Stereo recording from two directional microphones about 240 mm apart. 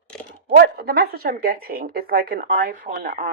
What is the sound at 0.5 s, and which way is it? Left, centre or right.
Speech, right.